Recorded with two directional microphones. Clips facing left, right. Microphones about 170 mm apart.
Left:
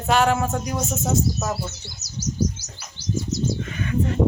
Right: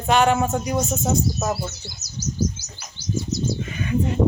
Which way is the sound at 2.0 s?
70° left (ahead or behind).